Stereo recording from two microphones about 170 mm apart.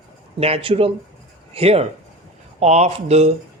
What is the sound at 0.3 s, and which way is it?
Speech, 35° right (ahead or behind).